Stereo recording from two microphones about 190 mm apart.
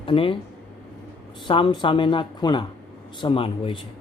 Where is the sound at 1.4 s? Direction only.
25° left (ahead or behind).